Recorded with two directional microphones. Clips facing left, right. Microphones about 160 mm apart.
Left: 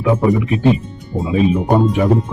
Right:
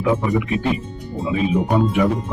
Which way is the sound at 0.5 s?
30° left (ahead or behind).